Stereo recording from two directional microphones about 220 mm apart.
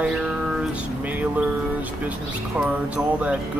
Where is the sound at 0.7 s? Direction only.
5° right (ahead or behind).